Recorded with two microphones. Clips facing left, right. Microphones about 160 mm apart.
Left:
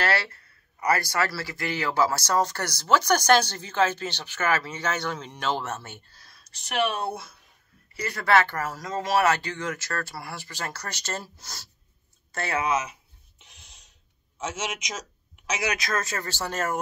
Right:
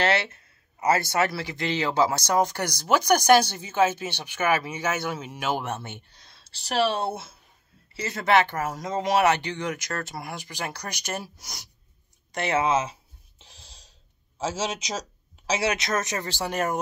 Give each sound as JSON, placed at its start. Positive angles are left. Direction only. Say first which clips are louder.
{"t": 0.0, "sound": "speech", "louder": "right 2 dB", "side_deg": -20}
{"t": 12.3, "sound": "writing", "louder": "right 3 dB", "side_deg": -20}
{"t": 14.4, "sound": "speech", "louder": "right 4 dB", "side_deg": -30}